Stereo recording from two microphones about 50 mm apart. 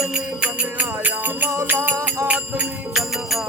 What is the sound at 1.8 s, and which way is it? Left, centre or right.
Music, right.